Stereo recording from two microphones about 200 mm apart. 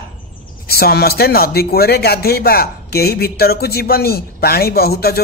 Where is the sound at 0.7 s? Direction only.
50° left (ahead or behind).